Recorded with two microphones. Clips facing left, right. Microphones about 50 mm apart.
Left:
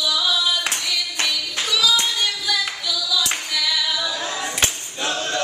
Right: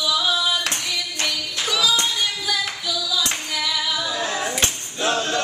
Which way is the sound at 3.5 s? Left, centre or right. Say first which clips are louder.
Left 1 dB; right.